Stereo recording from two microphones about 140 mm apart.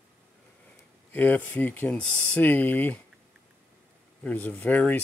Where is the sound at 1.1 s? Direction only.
10° left (ahead or behind).